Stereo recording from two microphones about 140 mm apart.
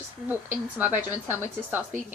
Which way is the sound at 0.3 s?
15° right (ahead or behind).